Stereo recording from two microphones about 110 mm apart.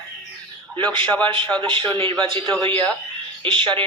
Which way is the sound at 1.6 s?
50° right (ahead or behind).